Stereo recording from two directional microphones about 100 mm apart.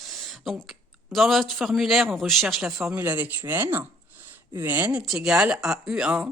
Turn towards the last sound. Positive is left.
turn(degrees=-10)  # may be behind; listen again after turning